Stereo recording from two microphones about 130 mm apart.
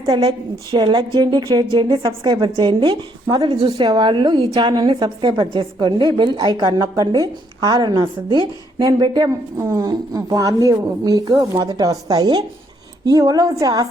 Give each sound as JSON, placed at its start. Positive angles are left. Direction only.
{"t": 0.3, "sound": "a woman's voice", "side_deg": -35}